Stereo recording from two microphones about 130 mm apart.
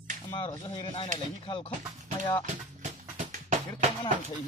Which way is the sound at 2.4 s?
70° right (ahead or behind).